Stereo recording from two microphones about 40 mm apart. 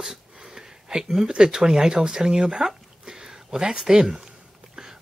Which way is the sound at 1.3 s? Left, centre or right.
Centre.